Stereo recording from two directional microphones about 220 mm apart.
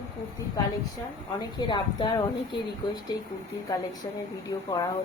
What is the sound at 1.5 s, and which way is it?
A woman's voice, 20° left (ahead or behind).